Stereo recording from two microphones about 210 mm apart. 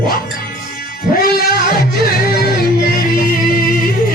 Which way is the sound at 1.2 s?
45° left (ahead or behind).